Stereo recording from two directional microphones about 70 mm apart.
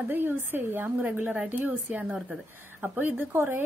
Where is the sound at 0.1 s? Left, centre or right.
Right.